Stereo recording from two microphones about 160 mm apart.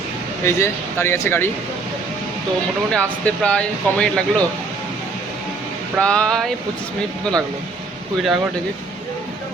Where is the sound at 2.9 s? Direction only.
5° left (ahead or behind).